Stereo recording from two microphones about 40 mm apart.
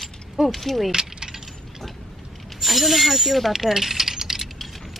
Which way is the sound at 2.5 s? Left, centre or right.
Centre.